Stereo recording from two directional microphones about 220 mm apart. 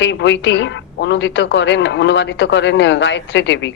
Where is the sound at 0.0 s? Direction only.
55° left (ahead or behind).